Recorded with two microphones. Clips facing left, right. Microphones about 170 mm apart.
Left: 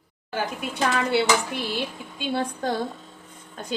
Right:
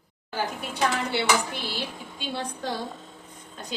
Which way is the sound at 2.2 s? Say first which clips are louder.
Left 6 dB; 50° left (ahead or behind).